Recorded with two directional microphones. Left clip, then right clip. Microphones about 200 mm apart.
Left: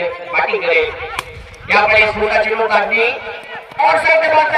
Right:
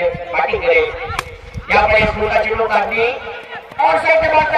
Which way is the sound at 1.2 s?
Centre (ahead or behind).